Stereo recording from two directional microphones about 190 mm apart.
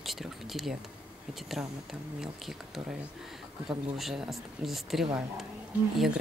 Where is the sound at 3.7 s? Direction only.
Centre (ahead or behind).